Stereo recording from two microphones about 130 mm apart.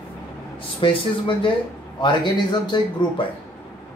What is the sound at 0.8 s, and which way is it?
Speech, 40° left (ahead or behind).